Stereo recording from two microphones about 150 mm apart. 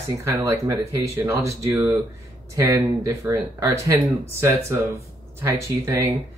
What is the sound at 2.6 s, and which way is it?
Mantra, 20° right (ahead or behind).